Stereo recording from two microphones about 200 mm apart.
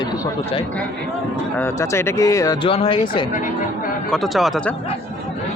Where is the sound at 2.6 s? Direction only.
25° left (ahead or behind).